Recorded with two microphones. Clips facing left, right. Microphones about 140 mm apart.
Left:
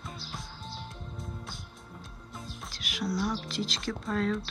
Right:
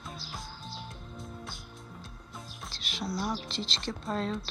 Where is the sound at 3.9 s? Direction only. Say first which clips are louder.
Left 2 dB; 25° right (ahead or behind).